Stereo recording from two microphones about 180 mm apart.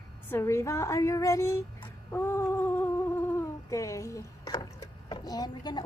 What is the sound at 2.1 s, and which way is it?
Humming, 15° left (ahead or behind).